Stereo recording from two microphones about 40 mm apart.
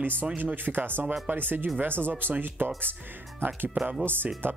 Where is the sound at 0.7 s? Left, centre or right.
Right.